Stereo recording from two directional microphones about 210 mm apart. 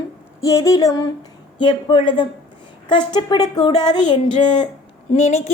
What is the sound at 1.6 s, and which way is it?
Speech, 20° left (ahead or behind).